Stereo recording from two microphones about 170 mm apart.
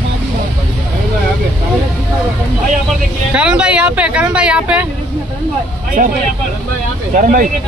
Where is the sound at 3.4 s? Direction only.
5° right (ahead or behind).